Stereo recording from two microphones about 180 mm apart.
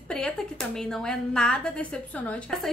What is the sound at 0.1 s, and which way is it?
A woman's voice, 5° left (ahead or behind).